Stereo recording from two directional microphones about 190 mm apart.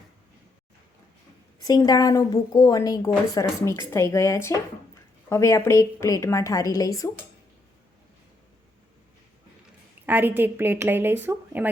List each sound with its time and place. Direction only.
1.6 s a woman's voice: 20° left (ahead or behind)
10.1 s a woman's voice: 10° right (ahead or behind)